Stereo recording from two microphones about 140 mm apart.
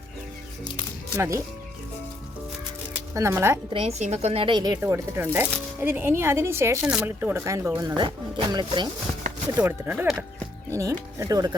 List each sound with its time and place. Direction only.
1.1 s speech: 20° right (ahead or behind)
3.2 s speech: 20° right (ahead or behind)
3.7 s a woman's voice: 45° right (ahead or behind)
4.8 s speech: 15° right (ahead or behind)
7.9 s speech: 35° right (ahead or behind)
9.6 s speech: 15° right (ahead or behind)